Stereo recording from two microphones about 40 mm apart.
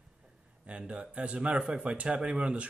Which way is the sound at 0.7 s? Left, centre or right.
Right.